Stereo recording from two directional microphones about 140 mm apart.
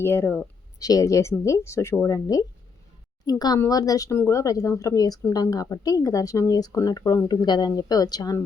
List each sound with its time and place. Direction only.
0.0 s a woman's voice: 15° left (ahead or behind)